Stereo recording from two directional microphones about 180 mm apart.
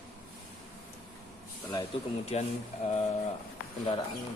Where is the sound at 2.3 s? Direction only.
35° left (ahead or behind).